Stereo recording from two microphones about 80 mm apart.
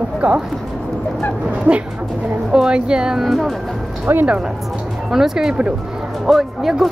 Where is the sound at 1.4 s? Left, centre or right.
Centre.